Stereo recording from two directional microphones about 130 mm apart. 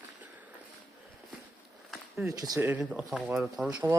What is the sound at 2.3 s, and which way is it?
Speech, 25° right (ahead or behind).